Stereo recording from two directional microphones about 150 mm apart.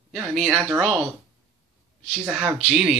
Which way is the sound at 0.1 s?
Centre (ahead or behind).